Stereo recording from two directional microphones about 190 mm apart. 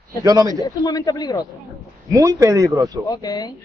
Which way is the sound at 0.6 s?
20° left (ahead or behind).